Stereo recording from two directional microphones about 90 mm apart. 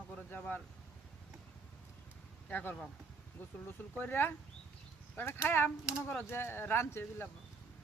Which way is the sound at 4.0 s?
25° left (ahead or behind).